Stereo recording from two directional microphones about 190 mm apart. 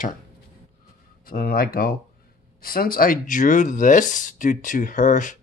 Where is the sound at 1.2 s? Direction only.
50° left (ahead or behind).